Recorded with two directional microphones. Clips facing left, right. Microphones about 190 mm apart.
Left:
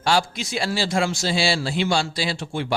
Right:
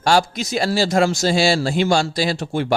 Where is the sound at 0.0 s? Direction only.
45° right (ahead or behind).